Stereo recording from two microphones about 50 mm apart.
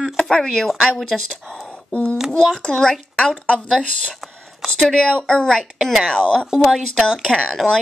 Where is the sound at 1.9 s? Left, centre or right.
Left.